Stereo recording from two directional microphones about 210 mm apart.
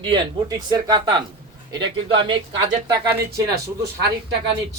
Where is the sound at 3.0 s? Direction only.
50° right (ahead or behind).